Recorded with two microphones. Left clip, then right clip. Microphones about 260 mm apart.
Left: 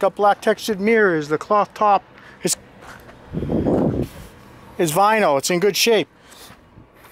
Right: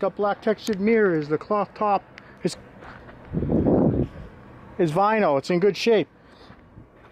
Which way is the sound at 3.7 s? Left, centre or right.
Centre.